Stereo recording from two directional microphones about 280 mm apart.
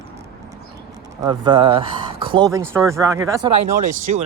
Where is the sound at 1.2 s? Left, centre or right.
Centre.